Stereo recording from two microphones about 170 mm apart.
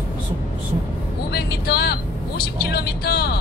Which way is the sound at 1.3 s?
70° left (ahead or behind).